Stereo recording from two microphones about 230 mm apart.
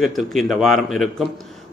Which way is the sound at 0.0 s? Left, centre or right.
Centre.